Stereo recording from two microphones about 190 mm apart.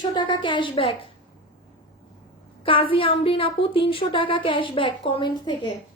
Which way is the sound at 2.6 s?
25° left (ahead or behind).